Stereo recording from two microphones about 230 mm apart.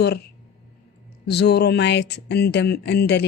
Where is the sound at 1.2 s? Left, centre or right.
Left.